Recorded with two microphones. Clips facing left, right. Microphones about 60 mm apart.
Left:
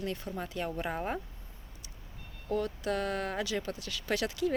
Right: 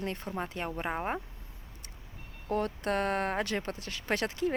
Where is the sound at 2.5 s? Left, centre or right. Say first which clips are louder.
Right 1 dB; right.